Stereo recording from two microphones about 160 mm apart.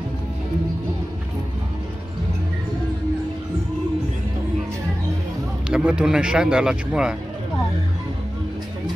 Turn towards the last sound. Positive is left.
turn(degrees=-5)  # may be behind; listen again after turning